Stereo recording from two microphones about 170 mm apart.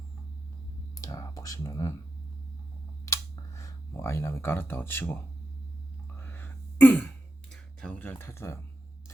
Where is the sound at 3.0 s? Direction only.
20° left (ahead or behind).